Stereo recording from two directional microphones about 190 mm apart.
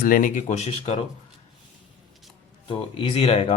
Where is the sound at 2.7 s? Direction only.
30° left (ahead or behind).